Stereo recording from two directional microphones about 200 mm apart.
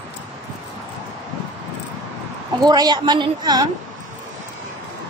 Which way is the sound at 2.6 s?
20° right (ahead or behind).